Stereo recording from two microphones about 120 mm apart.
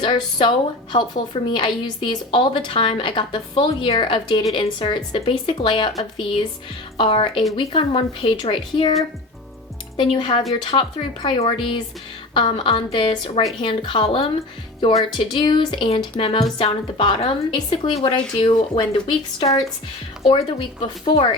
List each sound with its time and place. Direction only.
0.0 s a woman's voice: 40° left (ahead or behind)
10.0 s speech: 45° left (ahead or behind)
15.3 s speech: 40° left (ahead or behind)